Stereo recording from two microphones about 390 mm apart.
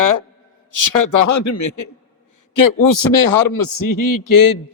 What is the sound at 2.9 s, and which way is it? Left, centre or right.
A man's voice, left.